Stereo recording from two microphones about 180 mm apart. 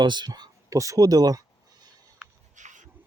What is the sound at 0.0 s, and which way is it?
Speech, 25° right (ahead or behind).